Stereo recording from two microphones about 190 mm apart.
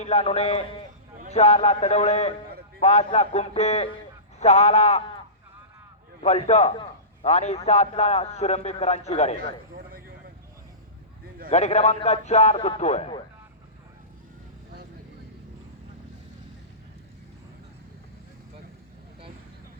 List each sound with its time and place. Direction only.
0.0 s a man's voice: 35° left (ahead or behind)
6.2 s a man's voice: 35° left (ahead or behind)
11.4 s a man's voice: 35° left (ahead or behind)